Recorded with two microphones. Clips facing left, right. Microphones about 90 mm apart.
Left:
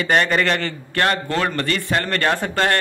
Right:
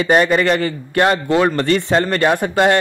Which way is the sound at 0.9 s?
15° right (ahead or behind).